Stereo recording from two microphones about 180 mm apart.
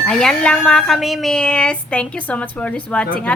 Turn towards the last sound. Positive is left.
turn(degrees=5)  # may be behind; listen again after turning